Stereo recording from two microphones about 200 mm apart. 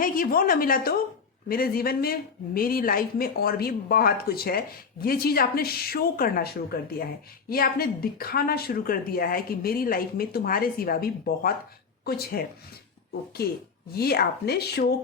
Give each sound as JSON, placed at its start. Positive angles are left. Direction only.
{"t": 0.0, "sound": "speech", "side_deg": 45}
{"t": 13.9, "sound": "speech", "side_deg": 50}